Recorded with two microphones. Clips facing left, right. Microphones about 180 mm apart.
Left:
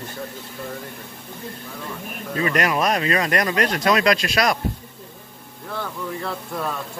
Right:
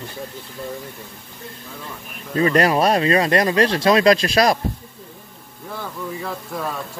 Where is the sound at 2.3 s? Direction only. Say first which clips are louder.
Right 5 dB; 35° right (ahead or behind).